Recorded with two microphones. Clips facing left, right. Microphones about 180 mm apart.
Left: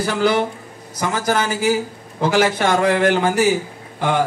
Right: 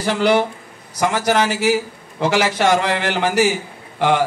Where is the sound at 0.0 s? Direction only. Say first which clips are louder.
Right 1 dB; 70° right (ahead or behind).